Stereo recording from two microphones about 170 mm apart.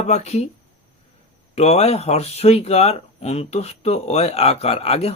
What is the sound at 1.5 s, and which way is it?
Speech, 40° left (ahead or behind).